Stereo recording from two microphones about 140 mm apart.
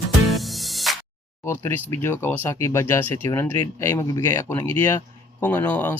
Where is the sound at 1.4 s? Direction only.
15° left (ahead or behind).